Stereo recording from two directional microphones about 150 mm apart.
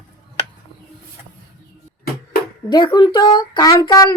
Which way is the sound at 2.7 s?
30° left (ahead or behind).